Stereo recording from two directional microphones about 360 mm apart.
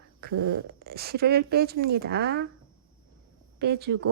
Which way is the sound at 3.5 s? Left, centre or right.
Right.